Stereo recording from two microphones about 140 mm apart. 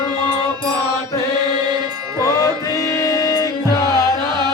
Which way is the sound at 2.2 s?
20° left (ahead or behind).